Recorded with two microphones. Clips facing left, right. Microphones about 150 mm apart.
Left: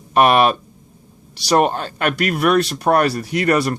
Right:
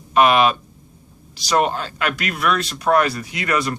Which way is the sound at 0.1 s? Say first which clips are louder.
Left 1 dB; 45° left (ahead or behind).